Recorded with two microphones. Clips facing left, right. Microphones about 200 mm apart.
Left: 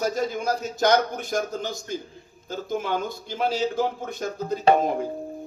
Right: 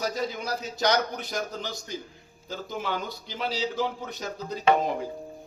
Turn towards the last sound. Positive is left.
turn(degrees=50)  # may be behind; listen again after turning